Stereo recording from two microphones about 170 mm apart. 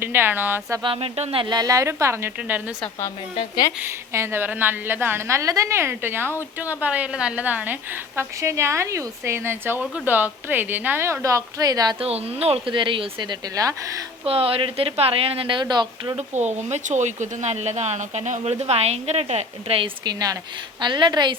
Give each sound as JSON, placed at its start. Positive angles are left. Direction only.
{"t": 0.0, "sound": "a woman's voice", "side_deg": -10}
{"t": 0.8, "sound": "a woman's voice", "side_deg": -30}
{"t": 4.1, "sound": "a woman's voice", "side_deg": -15}
{"t": 12.0, "sound": "a woman's voice", "side_deg": -35}
{"t": 14.3, "sound": "a woman's voice", "side_deg": -35}
{"t": 16.1, "sound": "a woman's voice", "side_deg": -45}